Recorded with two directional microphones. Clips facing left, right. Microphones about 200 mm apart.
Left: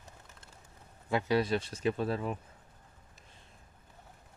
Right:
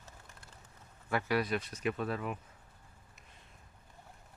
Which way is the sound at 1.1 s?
20° left (ahead or behind).